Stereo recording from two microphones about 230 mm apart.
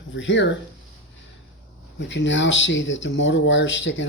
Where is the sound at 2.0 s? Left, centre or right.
Left.